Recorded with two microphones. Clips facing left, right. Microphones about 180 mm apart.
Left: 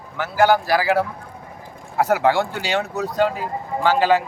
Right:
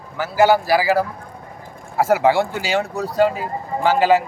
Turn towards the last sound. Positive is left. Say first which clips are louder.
# right 2 dB
turn(degrees=-10)  # may be behind; listen again after turning